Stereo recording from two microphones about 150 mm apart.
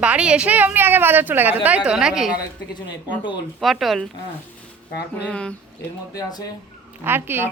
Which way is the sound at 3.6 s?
Centre (ahead or behind).